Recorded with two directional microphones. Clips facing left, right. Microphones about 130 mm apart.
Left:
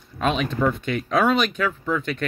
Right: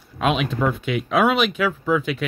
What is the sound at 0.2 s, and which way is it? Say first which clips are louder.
Speech: right 1 dB; 5° right (ahead or behind).